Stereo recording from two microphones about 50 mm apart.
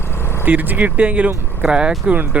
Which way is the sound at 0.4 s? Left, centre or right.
Right.